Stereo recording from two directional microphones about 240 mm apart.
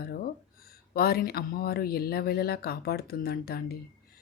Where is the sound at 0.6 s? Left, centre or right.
Left.